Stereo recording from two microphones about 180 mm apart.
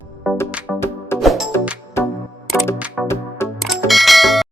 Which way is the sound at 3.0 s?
Centre (ahead or behind).